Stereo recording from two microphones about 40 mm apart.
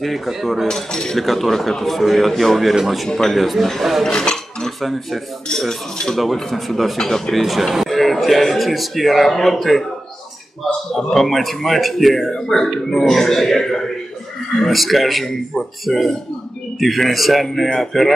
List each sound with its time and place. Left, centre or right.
0.0 s speech: centre
0.7 s cutlery: centre
1.1 s speech: centre
4.0 s dishes: centre
4.6 s dishes: centre
6.1 s speech: centre
7.0 s speech: centre
10.9 s speech: centre